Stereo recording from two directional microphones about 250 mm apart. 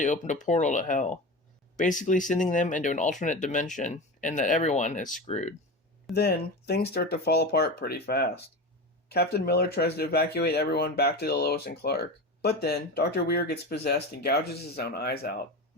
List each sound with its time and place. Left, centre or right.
0.0 s speech: left
6.1 s speech: left